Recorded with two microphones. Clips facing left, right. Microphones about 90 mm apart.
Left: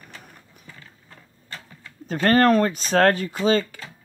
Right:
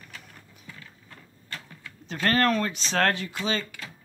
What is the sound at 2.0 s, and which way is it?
Speech, 40° left (ahead or behind).